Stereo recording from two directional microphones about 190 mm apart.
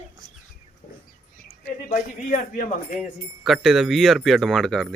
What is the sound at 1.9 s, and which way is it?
Speech, 45° left (ahead or behind).